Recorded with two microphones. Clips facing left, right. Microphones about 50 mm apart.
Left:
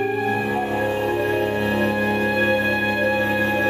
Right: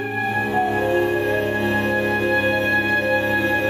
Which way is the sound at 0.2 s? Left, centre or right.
Centre.